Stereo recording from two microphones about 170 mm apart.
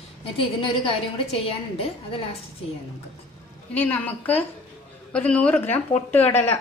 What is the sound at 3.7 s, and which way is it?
A woman's voice, 10° left (ahead or behind).